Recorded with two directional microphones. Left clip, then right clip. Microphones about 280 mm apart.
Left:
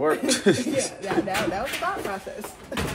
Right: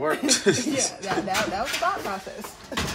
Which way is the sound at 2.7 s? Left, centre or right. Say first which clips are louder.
Right 1 dB; right.